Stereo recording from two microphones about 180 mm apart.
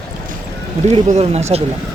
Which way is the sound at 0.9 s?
40° right (ahead or behind).